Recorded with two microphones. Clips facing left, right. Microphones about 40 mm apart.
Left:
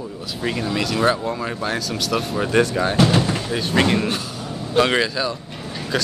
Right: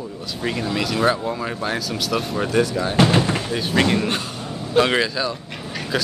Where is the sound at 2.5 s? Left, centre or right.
Left.